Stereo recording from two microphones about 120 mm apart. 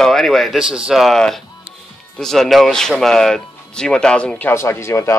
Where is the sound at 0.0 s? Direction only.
Centre (ahead or behind).